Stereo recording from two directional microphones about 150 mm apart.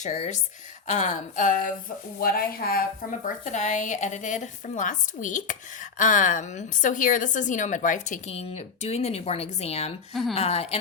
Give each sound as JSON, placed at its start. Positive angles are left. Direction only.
{"t": 0.0, "sound": "speech", "side_deg": 50}
{"t": 2.2, "sound": "a woman's voice", "side_deg": 80}
{"t": 10.1, "sound": "speech", "side_deg": 0}
{"t": 10.3, "sound": "speech", "side_deg": 45}